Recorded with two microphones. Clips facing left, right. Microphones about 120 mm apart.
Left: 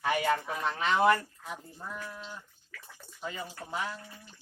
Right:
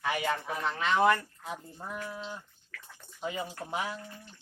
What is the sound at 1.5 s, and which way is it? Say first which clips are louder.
Speech: right 4 dB; 15° right (ahead or behind).